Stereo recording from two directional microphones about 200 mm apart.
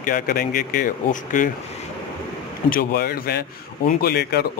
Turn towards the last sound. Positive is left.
turn(degrees=50)  # may be behind; listen again after turning